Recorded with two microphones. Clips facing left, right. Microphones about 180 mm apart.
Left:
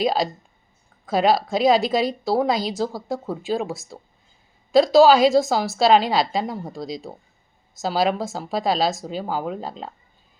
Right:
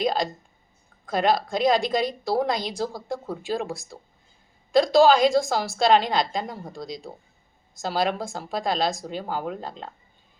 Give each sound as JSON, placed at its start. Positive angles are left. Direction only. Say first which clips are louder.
{"t": 0.0, "sound": "speech", "louder": "left 3 dB", "side_deg": 5}